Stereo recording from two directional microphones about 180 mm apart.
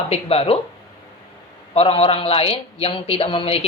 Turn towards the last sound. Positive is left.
turn(degrees=35)  # may be behind; listen again after turning